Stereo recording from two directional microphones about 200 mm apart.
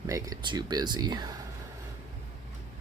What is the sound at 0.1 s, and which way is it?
Speech, 15° right (ahead or behind).